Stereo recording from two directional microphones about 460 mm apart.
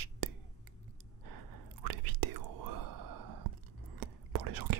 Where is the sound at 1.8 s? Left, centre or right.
Right.